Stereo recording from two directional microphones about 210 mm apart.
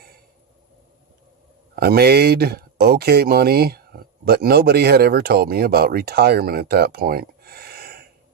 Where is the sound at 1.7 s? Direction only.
50° right (ahead or behind).